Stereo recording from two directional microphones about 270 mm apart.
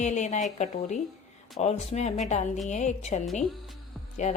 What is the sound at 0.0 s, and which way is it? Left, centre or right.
A woman's voice, left.